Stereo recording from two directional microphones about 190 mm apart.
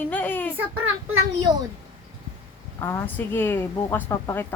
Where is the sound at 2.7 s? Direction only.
15° left (ahead or behind).